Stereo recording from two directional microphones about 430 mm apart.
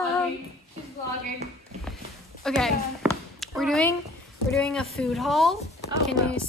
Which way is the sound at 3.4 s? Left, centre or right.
Centre.